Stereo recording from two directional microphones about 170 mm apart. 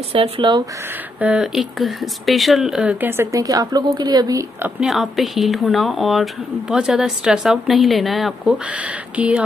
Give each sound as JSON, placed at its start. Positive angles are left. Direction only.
{"t": 0.1, "sound": "speech", "side_deg": -30}
{"t": 1.2, "sound": "speech", "side_deg": -5}